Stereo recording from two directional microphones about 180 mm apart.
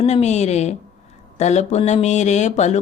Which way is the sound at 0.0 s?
35° left (ahead or behind).